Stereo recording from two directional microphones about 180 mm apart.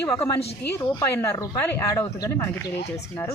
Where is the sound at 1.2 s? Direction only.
15° left (ahead or behind).